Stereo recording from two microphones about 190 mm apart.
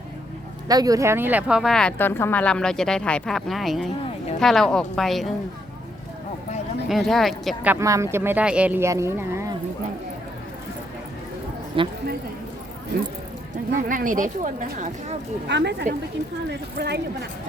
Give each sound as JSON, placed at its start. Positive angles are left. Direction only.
{"t": 0.7, "sound": "speech", "side_deg": -20}
{"t": 6.8, "sound": "speech", "side_deg": 0}
{"t": 7.7, "sound": "speech", "side_deg": -15}
{"t": 11.8, "sound": "speech", "side_deg": -25}
{"t": 13.7, "sound": "speech", "side_deg": -45}
{"t": 15.4, "sound": "speech", "side_deg": -65}